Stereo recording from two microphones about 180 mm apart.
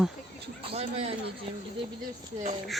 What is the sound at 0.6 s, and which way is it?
Speech, 35° right (ahead or behind).